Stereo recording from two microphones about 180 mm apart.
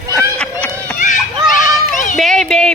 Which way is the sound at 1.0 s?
45° left (ahead or behind).